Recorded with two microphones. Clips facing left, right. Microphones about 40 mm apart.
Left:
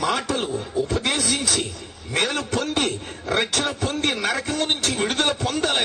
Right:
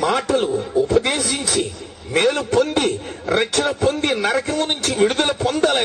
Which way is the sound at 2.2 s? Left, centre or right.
Centre.